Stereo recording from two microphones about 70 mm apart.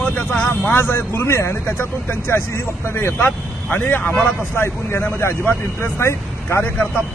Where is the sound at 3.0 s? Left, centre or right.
Left.